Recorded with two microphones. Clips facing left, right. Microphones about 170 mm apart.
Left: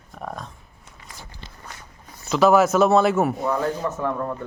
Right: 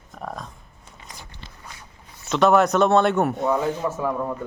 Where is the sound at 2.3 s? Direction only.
Centre (ahead or behind).